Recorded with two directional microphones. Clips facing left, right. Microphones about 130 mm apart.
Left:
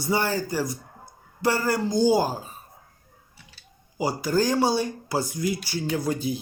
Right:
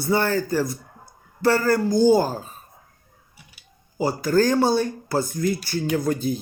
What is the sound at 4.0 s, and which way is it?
Speech, 15° left (ahead or behind).